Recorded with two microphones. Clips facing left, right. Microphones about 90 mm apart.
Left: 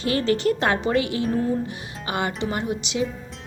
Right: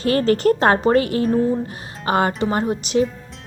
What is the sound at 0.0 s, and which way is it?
A woman's voice, 45° right (ahead or behind).